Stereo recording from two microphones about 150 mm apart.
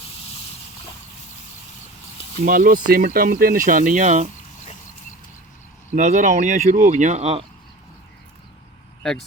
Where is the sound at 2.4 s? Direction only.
65° right (ahead or behind).